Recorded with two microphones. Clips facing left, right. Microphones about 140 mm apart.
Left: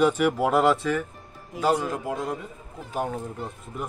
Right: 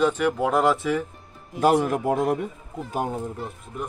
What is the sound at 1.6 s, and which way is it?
Speech, 60° right (ahead or behind).